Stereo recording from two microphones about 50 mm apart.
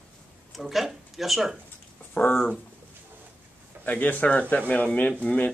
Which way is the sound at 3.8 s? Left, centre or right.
Left.